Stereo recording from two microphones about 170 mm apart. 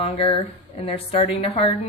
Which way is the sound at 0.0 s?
35° left (ahead or behind).